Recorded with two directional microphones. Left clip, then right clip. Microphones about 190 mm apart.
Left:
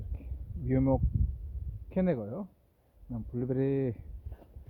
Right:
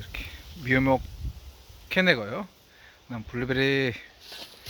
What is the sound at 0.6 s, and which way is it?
Speech, 5° right (ahead or behind).